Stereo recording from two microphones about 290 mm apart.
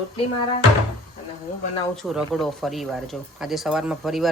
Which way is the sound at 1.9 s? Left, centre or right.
Centre.